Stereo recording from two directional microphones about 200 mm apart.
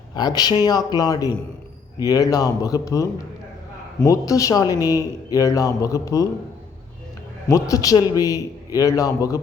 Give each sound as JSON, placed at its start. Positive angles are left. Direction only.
{"t": 0.1, "sound": "a man's voice", "side_deg": 20}
{"t": 7.4, "sound": "a man's voice", "side_deg": 15}